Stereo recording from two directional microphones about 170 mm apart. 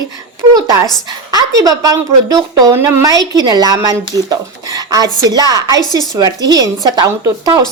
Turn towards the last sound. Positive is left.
turn(degrees=-25)  # may be behind; listen again after turning